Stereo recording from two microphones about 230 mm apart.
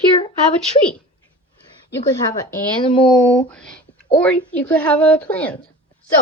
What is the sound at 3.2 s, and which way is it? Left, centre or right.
A woman's voice, centre.